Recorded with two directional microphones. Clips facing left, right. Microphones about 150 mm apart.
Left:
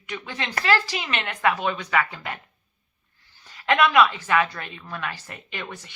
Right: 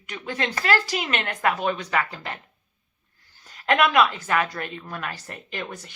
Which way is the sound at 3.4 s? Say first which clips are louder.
Even; 45° right (ahead or behind).